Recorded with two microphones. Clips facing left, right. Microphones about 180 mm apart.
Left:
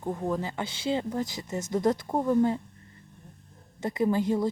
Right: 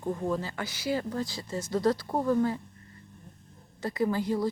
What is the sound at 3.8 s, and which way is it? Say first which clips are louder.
Speech: left 3 dB; 20° left (ahead or behind).